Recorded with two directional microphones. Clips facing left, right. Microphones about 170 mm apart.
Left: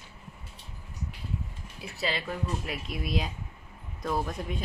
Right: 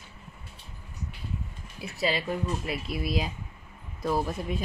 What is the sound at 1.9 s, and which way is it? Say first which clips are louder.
A woman's voice: right 4 dB; 10° right (ahead or behind).